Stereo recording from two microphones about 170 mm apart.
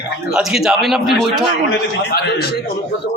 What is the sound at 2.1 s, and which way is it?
Speech, 65° left (ahead or behind).